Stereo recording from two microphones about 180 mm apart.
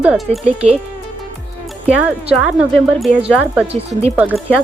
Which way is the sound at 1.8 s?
5° right (ahead or behind).